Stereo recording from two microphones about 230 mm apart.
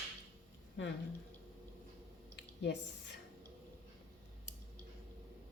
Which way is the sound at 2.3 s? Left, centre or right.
Left.